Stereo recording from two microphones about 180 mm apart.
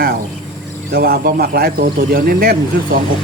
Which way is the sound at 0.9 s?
55° right (ahead or behind).